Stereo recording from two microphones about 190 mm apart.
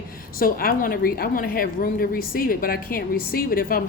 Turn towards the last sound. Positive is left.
turn(degrees=50)  # may be behind; listen again after turning